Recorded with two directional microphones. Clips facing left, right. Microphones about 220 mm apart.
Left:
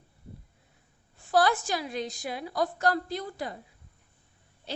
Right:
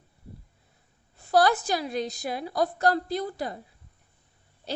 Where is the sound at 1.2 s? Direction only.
40° right (ahead or behind).